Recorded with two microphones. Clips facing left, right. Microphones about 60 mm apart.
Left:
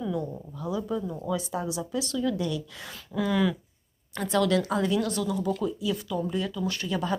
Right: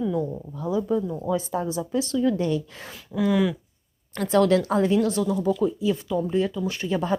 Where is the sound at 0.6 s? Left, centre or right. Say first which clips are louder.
Right 6 dB; right.